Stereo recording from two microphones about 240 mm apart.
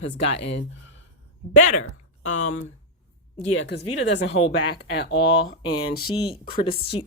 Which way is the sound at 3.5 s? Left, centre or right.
Left.